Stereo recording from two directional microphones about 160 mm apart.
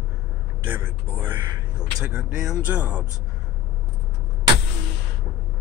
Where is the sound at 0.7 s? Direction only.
15° right (ahead or behind).